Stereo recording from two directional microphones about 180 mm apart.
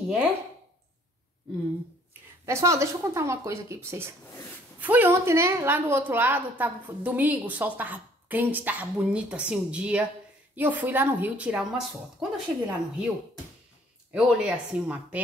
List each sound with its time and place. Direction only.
2.4 s a woman's voice: 15° right (ahead or behind)
14.1 s speech: 5° right (ahead or behind)